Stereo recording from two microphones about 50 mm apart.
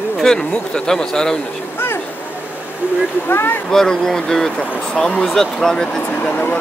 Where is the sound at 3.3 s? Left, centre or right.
Left.